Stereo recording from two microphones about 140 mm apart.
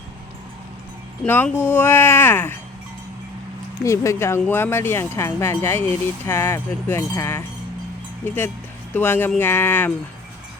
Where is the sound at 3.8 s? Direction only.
20° left (ahead or behind).